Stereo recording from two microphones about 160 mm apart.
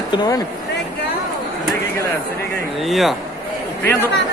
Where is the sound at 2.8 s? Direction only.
Centre (ahead or behind).